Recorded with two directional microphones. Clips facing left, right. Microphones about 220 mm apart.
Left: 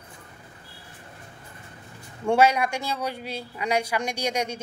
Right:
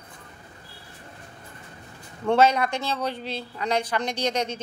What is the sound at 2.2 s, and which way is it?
Speech, 10° left (ahead or behind).